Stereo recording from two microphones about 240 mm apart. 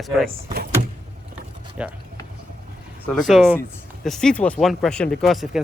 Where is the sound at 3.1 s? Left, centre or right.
Centre.